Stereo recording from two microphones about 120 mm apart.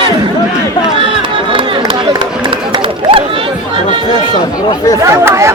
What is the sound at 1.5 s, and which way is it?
Run, 45° right (ahead or behind).